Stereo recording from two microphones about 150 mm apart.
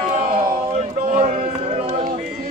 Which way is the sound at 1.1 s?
60° right (ahead or behind).